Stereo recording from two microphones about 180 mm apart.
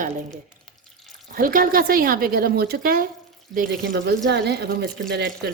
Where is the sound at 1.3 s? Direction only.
50° right (ahead or behind).